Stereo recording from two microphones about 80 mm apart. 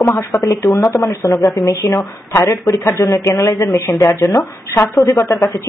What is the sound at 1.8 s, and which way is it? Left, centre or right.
Speech, left.